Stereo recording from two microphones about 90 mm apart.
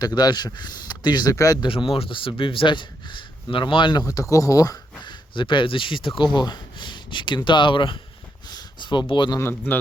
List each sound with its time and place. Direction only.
0.0 s speech: 50° left (ahead or behind)
1.6 s speech: 75° left (ahead or behind)
4.0 s speech: 40° left (ahead or behind)
5.0 s speech: 65° left (ahead or behind)
8.4 s a sound: 55° left (ahead or behind)
9.4 s speech: 25° left (ahead or behind)